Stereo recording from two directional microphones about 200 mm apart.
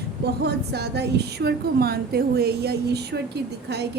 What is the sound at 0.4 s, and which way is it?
A woman's voice, 55° right (ahead or behind).